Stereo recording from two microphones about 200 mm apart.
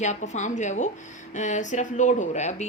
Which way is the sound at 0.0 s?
35° left (ahead or behind).